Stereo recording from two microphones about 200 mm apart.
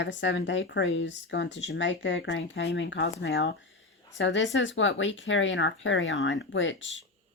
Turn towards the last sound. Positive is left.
turn(degrees=70)  # may be behind; listen again after turning